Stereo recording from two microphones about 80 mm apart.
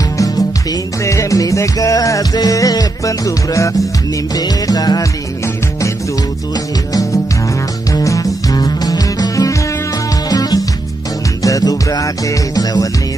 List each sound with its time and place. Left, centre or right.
1.0 s music: left
4.4 s music: left
7.9 s music: left